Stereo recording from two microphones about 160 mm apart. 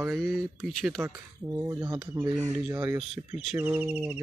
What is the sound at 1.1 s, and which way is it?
Speech, 20° right (ahead or behind).